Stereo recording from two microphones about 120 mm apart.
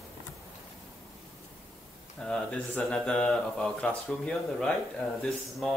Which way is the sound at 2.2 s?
5° left (ahead or behind).